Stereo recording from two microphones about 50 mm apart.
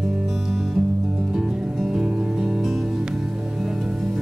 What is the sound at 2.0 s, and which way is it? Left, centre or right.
Music, centre.